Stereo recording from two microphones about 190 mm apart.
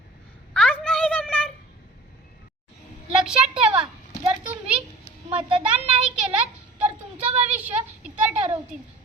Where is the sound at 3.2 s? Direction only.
5° right (ahead or behind).